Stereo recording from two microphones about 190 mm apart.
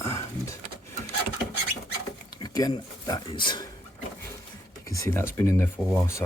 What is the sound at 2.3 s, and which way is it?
Speech, 20° left (ahead or behind).